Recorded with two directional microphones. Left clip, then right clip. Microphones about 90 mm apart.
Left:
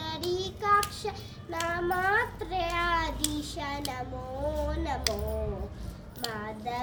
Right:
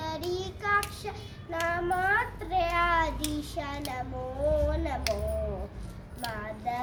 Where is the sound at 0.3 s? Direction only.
35° right (ahead or behind).